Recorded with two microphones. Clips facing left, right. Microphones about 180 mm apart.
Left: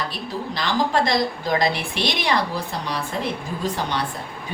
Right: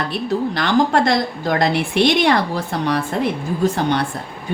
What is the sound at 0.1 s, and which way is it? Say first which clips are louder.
A woman's voice: right 9 dB; 55° right (ahead or behind).